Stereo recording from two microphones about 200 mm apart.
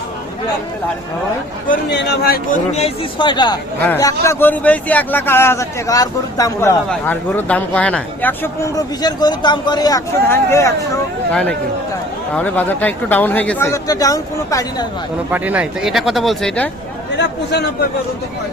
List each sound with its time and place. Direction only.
1.9 s speech: 55° left (ahead or behind)
2.7 s speech: 25° left (ahead or behind)
3.8 s speech: 10° left (ahead or behind)
15.3 s speech: 5° right (ahead or behind)
17.2 s speech: 60° left (ahead or behind)